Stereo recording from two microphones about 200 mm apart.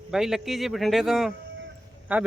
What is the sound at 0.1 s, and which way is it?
Speech, centre (ahead or behind).